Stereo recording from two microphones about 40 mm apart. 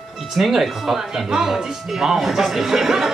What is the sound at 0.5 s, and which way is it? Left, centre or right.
Speech, centre.